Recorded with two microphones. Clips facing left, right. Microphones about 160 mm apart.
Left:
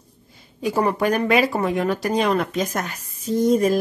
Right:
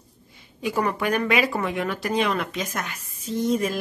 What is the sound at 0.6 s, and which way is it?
Speech, 35° left (ahead or behind).